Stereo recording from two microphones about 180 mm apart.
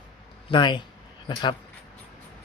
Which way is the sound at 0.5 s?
25° left (ahead or behind).